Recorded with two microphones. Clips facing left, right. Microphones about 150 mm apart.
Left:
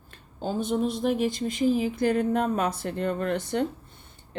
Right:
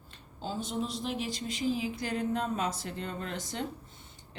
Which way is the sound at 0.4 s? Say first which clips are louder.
Left 8 dB; 55° left (ahead or behind).